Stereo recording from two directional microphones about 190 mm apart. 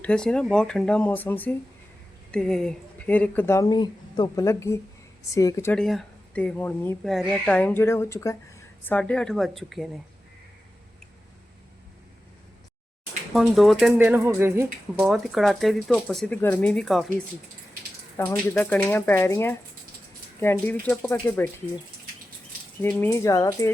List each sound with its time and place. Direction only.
0.0 s speech: 5° left (ahead or behind)
5.7 s speech: centre (ahead or behind)
13.3 s speech: centre (ahead or behind)
18.2 s speech: 15° left (ahead or behind)
22.8 s speech: 10° left (ahead or behind)